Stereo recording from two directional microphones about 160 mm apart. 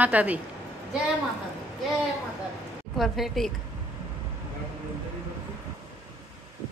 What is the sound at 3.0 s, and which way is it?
Speech, centre (ahead or behind).